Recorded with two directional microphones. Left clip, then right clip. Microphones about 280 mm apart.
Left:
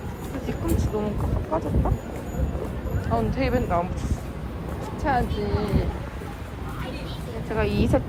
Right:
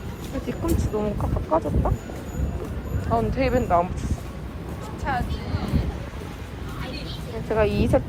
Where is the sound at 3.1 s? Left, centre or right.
Centre.